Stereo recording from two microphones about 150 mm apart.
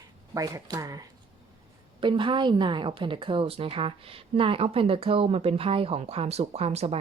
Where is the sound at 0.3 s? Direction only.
25° right (ahead or behind).